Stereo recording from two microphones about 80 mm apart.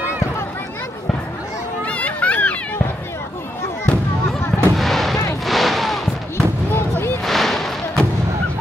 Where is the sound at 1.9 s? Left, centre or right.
Centre.